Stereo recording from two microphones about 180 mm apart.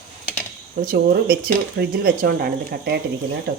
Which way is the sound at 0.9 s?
60° right (ahead or behind).